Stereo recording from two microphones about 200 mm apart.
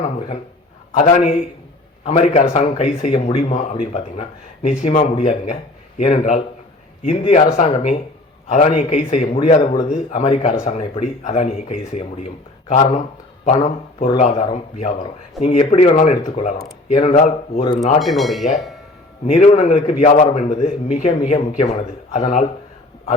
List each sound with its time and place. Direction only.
0.9 s a man's voice: 35° left (ahead or behind)
18.0 s speech: centre (ahead or behind)
19.2 s a man's voice: 35° left (ahead or behind)